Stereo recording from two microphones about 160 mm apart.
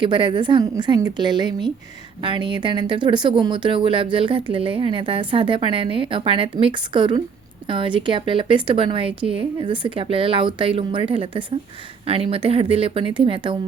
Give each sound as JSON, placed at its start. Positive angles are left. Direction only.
{"t": 0.0, "sound": "a woman's voice", "side_deg": -30}